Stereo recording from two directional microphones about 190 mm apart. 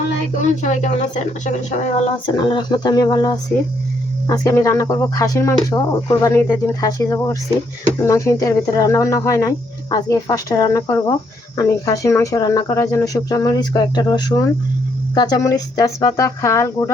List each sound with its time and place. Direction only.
0.6 s speech: 40° left (ahead or behind)
2.2 s speech: 25° left (ahead or behind)